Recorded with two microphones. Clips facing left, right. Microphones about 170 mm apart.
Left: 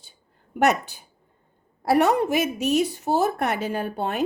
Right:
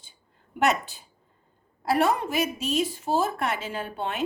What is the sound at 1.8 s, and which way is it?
A woman's voice, 60° left (ahead or behind).